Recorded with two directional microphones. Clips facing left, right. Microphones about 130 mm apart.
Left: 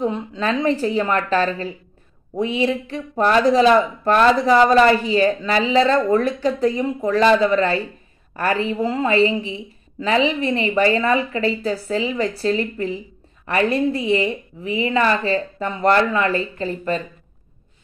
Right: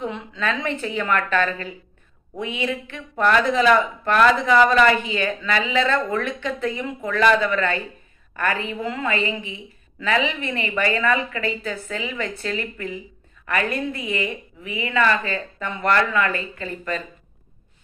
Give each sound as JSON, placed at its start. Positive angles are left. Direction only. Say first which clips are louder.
{"t": 0.0, "sound": "speech", "louder": "left 5 dB", "side_deg": 35}